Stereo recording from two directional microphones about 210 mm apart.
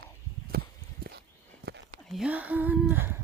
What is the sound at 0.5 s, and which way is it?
Horse, 45° right (ahead or behind).